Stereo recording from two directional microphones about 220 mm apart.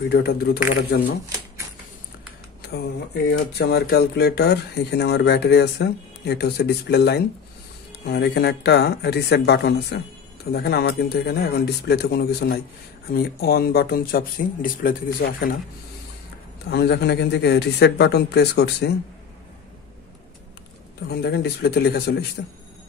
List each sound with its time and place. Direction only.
0.1 s speech: 45° left (ahead or behind)
2.6 s speech: 45° left (ahead or behind)
16.7 s speech: 50° left (ahead or behind)
21.1 s speech: 45° left (ahead or behind)